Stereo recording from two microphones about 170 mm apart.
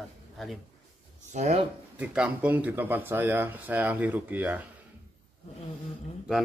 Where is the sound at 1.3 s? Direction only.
40° right (ahead or behind).